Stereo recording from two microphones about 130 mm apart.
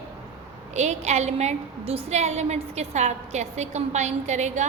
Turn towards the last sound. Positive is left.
turn(degrees=-60)  # may be behind; listen again after turning